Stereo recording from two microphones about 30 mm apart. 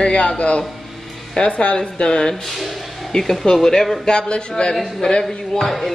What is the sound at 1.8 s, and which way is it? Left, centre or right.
Speech, left.